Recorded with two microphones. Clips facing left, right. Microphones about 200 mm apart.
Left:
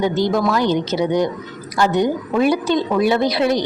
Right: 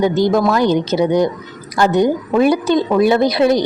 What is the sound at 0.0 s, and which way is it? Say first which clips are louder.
Speech: right 4 dB; 45° right (ahead or behind).